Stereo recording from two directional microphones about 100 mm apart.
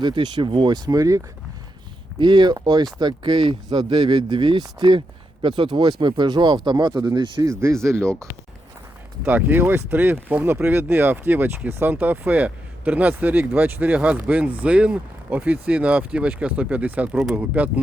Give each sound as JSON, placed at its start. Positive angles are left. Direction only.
{"t": 0.0, "sound": "speech", "side_deg": -50}
{"t": 2.1, "sound": "speech", "side_deg": -50}
{"t": 7.6, "sound": "speech", "side_deg": -30}
{"t": 9.2, "sound": "speech", "side_deg": -20}